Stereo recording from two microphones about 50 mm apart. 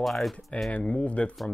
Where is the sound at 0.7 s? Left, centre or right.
Left.